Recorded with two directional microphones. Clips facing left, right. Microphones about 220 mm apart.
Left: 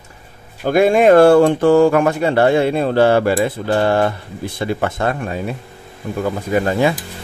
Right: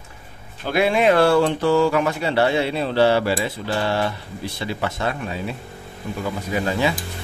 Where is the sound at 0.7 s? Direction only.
45° left (ahead or behind).